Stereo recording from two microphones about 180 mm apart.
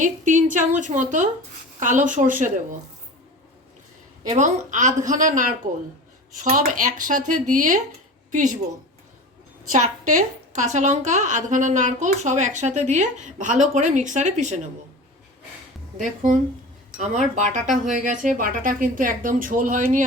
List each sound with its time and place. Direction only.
0.0 s a woman's voice: 45° right (ahead or behind)
4.4 s a woman's voice: 40° right (ahead or behind)
9.7 s a woman's voice: 45° right (ahead or behind)
16.0 s a woman's voice: 45° right (ahead or behind)